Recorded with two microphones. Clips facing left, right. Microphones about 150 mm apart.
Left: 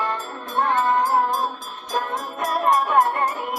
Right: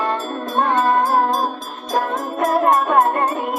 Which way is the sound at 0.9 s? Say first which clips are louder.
Right 3 dB; 50° right (ahead or behind).